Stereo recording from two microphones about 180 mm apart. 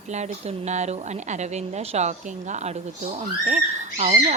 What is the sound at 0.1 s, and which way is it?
A woman's voice, 40° right (ahead or behind).